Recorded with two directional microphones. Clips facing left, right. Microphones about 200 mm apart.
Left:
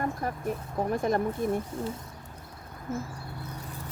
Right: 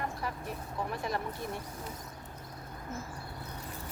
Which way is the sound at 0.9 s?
45° left (ahead or behind).